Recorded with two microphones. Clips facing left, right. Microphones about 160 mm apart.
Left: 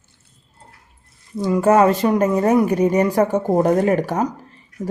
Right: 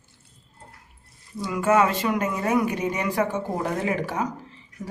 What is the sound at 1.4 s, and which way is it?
Speech, 35° left (ahead or behind).